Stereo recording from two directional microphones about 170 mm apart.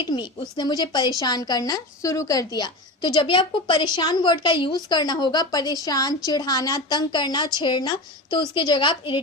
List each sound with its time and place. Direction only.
0.0 s a woman's voice: 25° left (ahead or behind)